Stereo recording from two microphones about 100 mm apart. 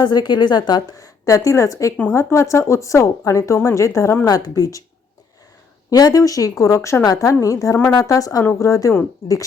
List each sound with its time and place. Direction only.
0.0 s a woman's voice: 45° left (ahead or behind); by 4.3 s 25° left (ahead or behind)
4.3 s a woman's voice: 40° left (ahead or behind)
5.9 s a woman's voice: 40° left (ahead or behind); by 9.4 s 25° left (ahead or behind)